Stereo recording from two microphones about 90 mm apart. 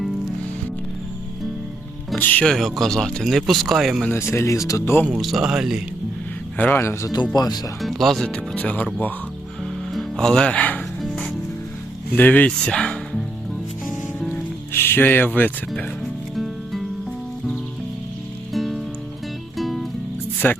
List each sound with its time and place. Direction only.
2.1 s a man's voice: 20° left (ahead or behind)
2.4 s speech: 5° left (ahead or behind)
4.1 s speech: 30° left (ahead or behind)
5.0 s speech: 5° right (ahead or behind)
6.6 s a man's voice: 20° left (ahead or behind)
7.0 s speech: 45° left (ahead or behind)
7.8 s speech: centre (ahead or behind)
8.5 s speech: 15° left (ahead or behind)
9.9 s speech: 5° left (ahead or behind)
12.1 s speech: 20° left (ahead or behind)
14.7 s speech: 25° left (ahead or behind)
16.3 s music: centre (ahead or behind)
18.5 s music: centre (ahead or behind)
20.4 s speech: 15° left (ahead or behind)